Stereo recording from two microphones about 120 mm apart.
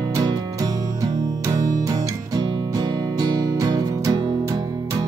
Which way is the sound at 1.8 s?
35° right (ahead or behind).